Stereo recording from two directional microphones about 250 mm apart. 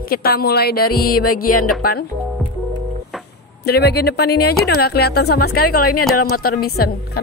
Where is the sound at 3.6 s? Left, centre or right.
Left.